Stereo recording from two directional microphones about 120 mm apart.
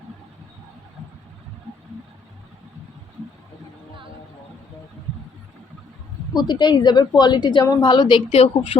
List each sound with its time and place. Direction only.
6.3 s a woman's voice: 40° left (ahead or behind)
8.3 s a woman's voice: 55° left (ahead or behind)